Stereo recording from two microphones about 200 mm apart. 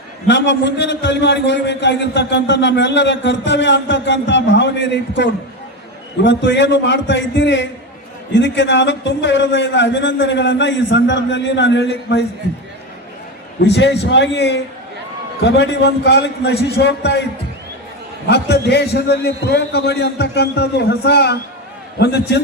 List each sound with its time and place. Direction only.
0.3 s a man's voice: 60° left (ahead or behind)
13.6 s a man's voice: 60° left (ahead or behind)
18.3 s a man's voice: 55° left (ahead or behind)